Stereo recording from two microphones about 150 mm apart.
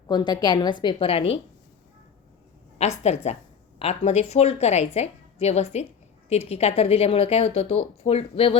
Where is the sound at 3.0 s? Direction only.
45° left (ahead or behind).